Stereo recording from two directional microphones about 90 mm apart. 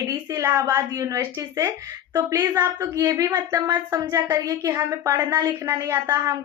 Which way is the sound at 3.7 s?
45° right (ahead or behind).